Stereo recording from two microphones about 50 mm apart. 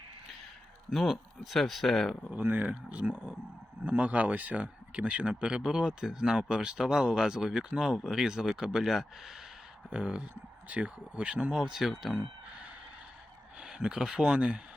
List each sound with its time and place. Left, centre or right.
0.9 s speech: centre
2.3 s speech: right
2.6 s speech: right; by 9.3 s centre
9.9 s speech: centre
11.5 s speech: centre
13.6 s a sound: centre
14.2 s speech: right